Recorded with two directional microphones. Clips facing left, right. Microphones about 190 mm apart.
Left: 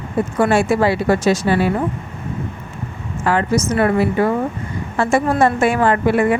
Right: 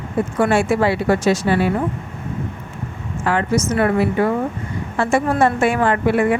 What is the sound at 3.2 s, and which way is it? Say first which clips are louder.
A woman's voice: left 1 dB; 35° left (ahead or behind).